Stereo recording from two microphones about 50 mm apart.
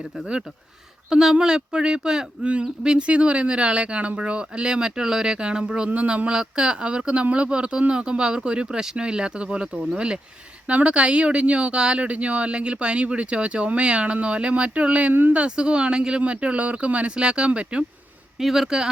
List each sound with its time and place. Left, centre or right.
1.1 s speech: centre
5.9 s speech: right
18.3 s speech: centre